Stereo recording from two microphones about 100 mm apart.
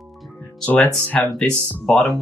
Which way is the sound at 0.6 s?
15° left (ahead or behind).